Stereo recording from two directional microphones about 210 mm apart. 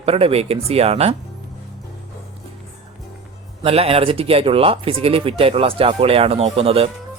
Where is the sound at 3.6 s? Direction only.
30° right (ahead or behind).